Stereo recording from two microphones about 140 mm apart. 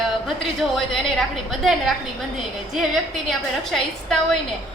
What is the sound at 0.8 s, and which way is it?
A woman's voice, centre (ahead or behind).